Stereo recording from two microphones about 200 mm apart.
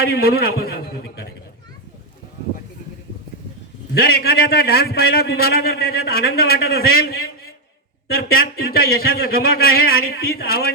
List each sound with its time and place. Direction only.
0.0 s a man's voice: 50° left (ahead or behind)
3.9 s a man's voice: 50° left (ahead or behind)